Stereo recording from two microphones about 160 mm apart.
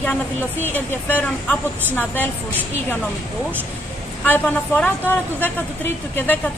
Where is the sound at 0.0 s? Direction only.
10° left (ahead or behind).